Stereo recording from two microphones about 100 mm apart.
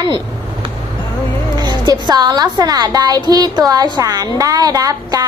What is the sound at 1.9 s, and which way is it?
A woman's voice, 45° right (ahead or behind).